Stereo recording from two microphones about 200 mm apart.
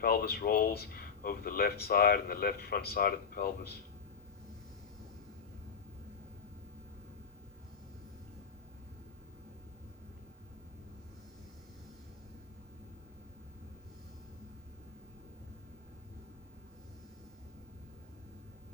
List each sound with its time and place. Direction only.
0.0 s speech: 45° left (ahead or behind)